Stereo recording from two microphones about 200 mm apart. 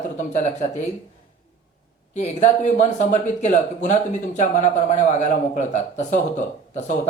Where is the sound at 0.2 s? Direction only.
35° left (ahead or behind).